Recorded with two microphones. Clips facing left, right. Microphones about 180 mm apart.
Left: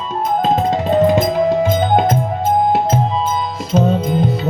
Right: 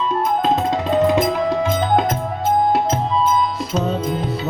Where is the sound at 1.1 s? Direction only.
45° left (ahead or behind).